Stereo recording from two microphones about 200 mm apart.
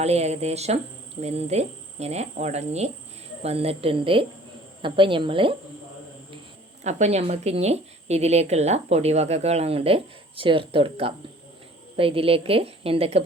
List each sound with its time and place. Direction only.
0.0 s a woman's voice: 30° right (ahead or behind)
6.8 s a woman's voice: 35° right (ahead or behind)